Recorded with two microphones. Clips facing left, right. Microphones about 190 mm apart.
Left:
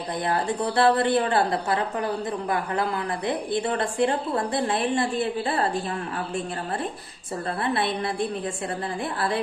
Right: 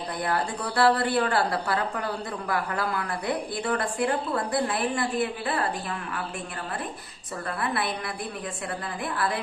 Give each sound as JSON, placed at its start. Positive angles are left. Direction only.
{"t": 0.3, "sound": "a woman's voice", "side_deg": 25}
{"t": 7.6, "sound": "a woman's voice", "side_deg": 25}